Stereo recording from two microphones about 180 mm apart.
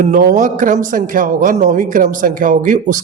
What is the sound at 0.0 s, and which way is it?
Speech, 45° right (ahead or behind).